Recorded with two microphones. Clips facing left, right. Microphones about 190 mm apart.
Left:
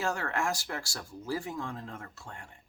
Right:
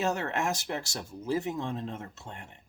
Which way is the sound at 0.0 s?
20° right (ahead or behind).